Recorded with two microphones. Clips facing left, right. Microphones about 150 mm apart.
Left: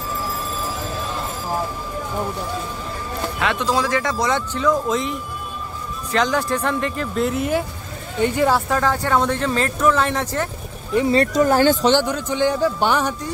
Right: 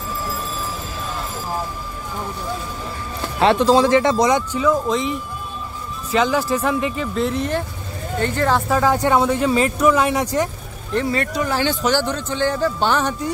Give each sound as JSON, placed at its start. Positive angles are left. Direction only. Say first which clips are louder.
{"t": 3.3, "sound": "a man's voice", "louder": "right 8 dB", "side_deg": -30}
{"t": 8.6, "sound": "speech", "louder": "right 2 dB", "side_deg": -5}
{"t": 8.9, "sound": "speech", "louder": "right 3 dB", "side_deg": -15}
{"t": 10.9, "sound": "a man's voice", "louder": "left 3 dB", "side_deg": 5}
{"t": 11.3, "sound": "speech", "louder": "left 6 dB", "side_deg": 45}
{"t": 11.8, "sound": "a man's voice", "louder": "left 2 dB", "side_deg": 20}